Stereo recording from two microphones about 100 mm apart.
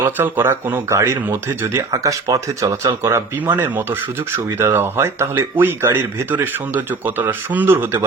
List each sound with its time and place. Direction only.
0.0 s speech: 20° right (ahead or behind)